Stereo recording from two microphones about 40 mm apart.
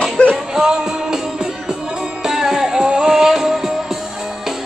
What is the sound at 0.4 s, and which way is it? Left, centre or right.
Music, centre.